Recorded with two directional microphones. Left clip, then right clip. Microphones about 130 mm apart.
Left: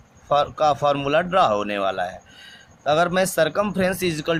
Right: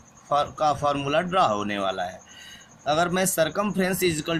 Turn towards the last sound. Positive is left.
turn(degrees=45)  # may be behind; listen again after turning